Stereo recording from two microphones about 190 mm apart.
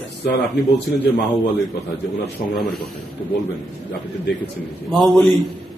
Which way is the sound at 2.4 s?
45° left (ahead or behind).